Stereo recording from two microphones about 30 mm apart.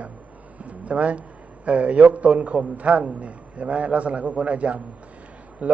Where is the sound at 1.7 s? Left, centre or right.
Right.